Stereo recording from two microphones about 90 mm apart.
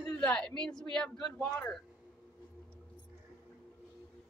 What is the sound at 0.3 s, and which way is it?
Speech, 10° left (ahead or behind).